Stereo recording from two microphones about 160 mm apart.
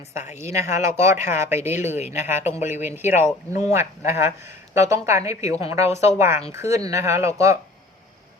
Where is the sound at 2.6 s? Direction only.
15° right (ahead or behind).